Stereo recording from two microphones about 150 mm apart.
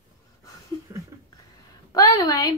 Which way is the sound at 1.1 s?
25° right (ahead or behind).